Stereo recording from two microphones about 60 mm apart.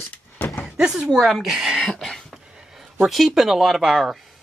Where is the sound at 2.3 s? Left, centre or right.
Centre.